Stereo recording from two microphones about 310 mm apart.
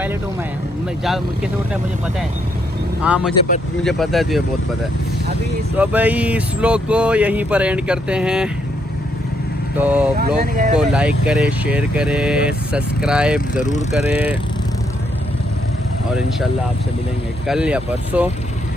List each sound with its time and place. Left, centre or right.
1.0 s speech: centre
5.7 s speech: centre
9.7 s speech: centre
10.2 s speech: right
10.8 s speech: centre
13.5 s speech: left
14.1 s speech: centre
17.4 s speech: centre